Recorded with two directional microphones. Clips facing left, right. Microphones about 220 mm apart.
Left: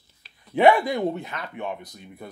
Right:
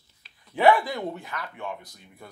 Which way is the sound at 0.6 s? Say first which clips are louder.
Left 3 dB; 20° left (ahead or behind).